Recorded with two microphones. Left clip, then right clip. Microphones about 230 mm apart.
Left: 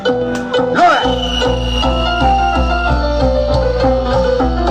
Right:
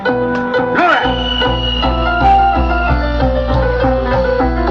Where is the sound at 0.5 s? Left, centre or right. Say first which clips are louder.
Left 2 dB; left.